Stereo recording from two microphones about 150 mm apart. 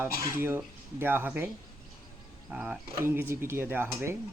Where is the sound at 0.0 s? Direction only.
15° right (ahead or behind).